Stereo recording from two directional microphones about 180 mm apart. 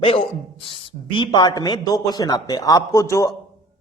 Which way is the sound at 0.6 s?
30° left (ahead or behind).